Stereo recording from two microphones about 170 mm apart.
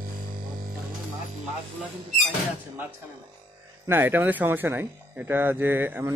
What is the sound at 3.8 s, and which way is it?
Speech, 10° right (ahead or behind).